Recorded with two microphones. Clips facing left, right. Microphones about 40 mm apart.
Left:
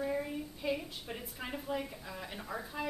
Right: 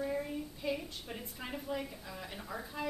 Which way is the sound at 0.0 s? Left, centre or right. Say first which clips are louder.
Left 1 dB; centre.